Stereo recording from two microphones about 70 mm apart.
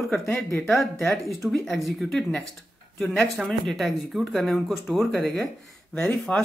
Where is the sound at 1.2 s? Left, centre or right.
Centre.